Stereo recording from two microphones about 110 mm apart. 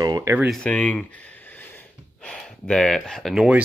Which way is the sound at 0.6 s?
10° left (ahead or behind).